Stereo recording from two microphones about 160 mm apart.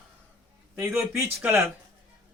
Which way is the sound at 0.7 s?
15° right (ahead or behind).